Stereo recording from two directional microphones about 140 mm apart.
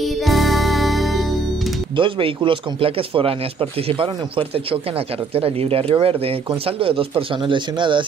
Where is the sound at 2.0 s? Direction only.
40° right (ahead or behind).